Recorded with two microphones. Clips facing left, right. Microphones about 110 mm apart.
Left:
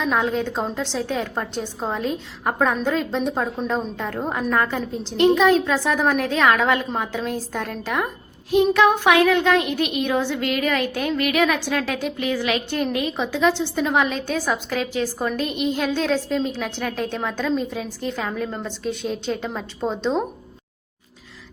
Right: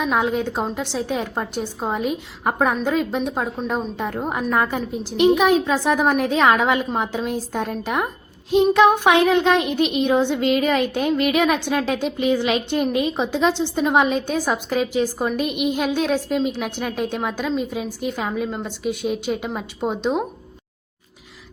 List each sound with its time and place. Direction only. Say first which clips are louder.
0.0 s a woman's voice: right 1 dB; 15° right (ahead or behind)
3.9 s a woman's voice: right 1 dB; 15° right (ahead or behind)